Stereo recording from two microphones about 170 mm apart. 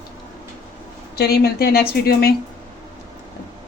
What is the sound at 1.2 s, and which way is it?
Speech, 65° left (ahead or behind).